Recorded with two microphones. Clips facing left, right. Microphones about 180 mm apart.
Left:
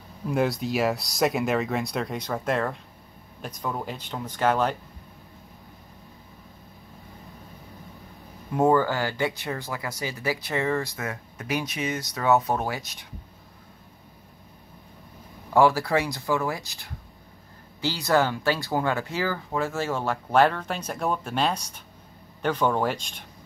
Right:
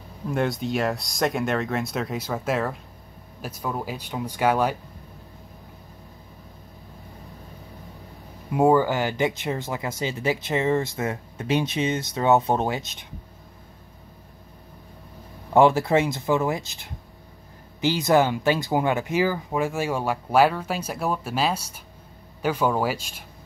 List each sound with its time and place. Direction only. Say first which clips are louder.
0.3 s speech: even; centre (ahead or behind)
8.5 s speech: right 2 dB; 10° right (ahead or behind)
15.5 s speech: right 3 dB; 20° right (ahead or behind); by 23.2 s 5° right (ahead or behind)